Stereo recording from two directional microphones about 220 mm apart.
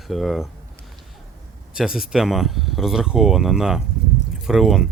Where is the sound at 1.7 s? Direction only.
5° right (ahead or behind).